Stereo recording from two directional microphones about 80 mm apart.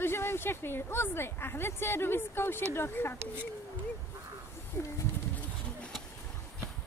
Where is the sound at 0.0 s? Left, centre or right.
Left.